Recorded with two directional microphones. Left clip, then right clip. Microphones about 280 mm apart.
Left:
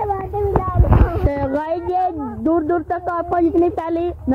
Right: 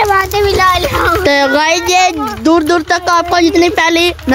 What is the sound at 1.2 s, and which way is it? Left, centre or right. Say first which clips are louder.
Speech: right 11 dB; right.